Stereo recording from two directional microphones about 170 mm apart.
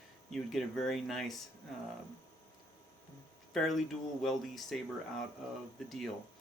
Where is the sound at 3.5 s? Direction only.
Centre (ahead or behind).